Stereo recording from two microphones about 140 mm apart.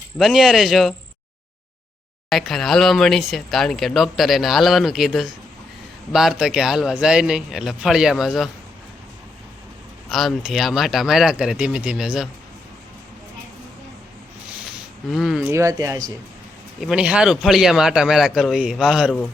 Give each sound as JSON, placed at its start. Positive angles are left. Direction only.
{"t": 0.2, "sound": "a man's voice", "side_deg": 0}
{"t": 2.3, "sound": "a man's voice", "side_deg": 0}
{"t": 10.1, "sound": "a man's voice", "side_deg": 0}
{"t": 15.1, "sound": "a man's voice", "side_deg": 0}
{"t": 15.4, "sound": "speech", "side_deg": -20}
{"t": 16.8, "sound": "a man's voice", "side_deg": -5}